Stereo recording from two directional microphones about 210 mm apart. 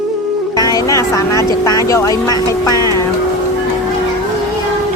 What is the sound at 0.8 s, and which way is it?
Speech, 15° left (ahead or behind).